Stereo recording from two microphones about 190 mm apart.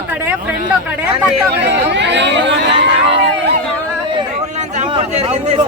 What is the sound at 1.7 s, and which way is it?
Speech, 65° right (ahead or behind).